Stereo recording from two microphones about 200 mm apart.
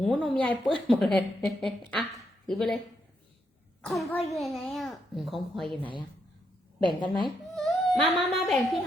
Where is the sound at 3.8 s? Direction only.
5° left (ahead or behind).